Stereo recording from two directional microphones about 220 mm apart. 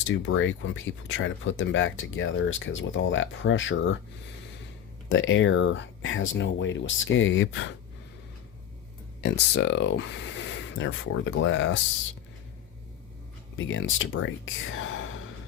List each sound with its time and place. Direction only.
0.1 s speech: 60° left (ahead or behind)
5.0 s speech: 60° left (ahead or behind)
9.2 s speech: 55° left (ahead or behind)
13.6 s speech: 60° left (ahead or behind)